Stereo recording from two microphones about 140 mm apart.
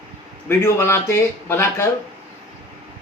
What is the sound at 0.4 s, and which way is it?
Speech, 15° left (ahead or behind).